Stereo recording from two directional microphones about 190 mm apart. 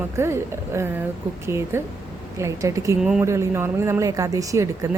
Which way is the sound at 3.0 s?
5° right (ahead or behind).